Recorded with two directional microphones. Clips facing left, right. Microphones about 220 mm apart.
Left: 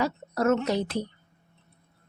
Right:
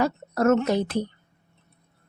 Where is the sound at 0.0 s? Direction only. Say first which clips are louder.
Right 3 dB; 50° right (ahead or behind).